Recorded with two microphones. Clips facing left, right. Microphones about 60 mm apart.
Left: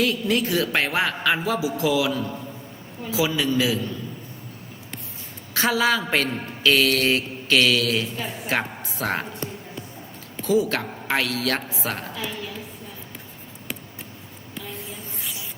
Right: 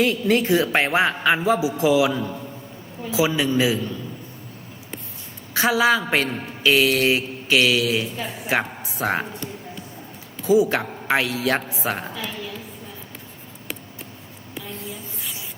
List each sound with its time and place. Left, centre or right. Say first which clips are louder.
0.0 s a man's voice: right 3 dB; right
5.5 s a man's voice: right 3 dB; centre
10.4 s a man's voice: right 4 dB; centre